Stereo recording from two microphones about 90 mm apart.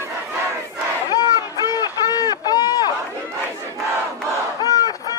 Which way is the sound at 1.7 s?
45° left (ahead or behind).